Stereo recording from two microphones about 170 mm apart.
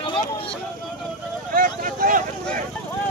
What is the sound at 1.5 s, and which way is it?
Speech, 55° right (ahead or behind).